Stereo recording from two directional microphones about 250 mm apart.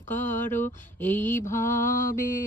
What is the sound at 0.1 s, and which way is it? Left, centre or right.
Speech, centre.